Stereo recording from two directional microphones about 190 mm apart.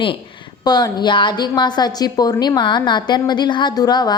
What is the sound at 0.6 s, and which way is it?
A woman's voice, 20° left (ahead or behind).